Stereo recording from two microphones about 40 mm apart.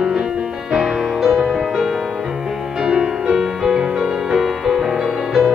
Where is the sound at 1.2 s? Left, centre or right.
Centre.